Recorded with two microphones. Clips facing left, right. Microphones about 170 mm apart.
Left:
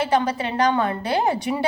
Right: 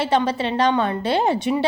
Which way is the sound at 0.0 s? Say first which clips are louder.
Right 1 dB; 25° right (ahead or behind).